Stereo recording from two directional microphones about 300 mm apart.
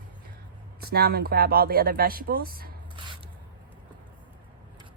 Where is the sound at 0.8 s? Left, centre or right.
Right.